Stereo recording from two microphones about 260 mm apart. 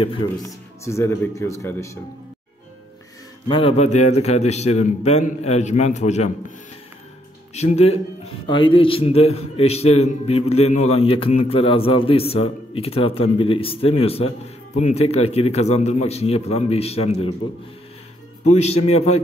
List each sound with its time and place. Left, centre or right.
0.0 s a man's voice: centre
3.4 s a man's voice: centre
7.5 s a man's voice: left
18.4 s a man's voice: left